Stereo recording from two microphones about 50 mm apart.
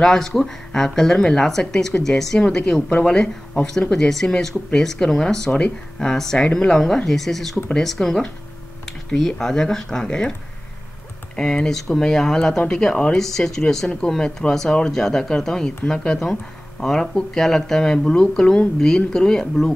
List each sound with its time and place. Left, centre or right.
0.0 s speech: centre
3.9 s speech: centre
11.3 s speech: centre